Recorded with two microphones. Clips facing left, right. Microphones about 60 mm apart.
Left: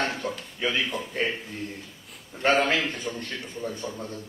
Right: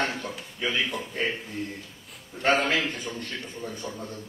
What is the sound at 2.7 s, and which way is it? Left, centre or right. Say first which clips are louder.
A man's voice: left 1 dB; left.